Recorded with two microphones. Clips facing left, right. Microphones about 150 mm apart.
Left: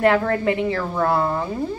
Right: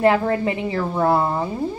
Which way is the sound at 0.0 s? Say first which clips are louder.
Even; 20° right (ahead or behind).